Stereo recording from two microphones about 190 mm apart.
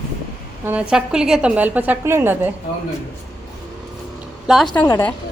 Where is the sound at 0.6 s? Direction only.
5° right (ahead or behind).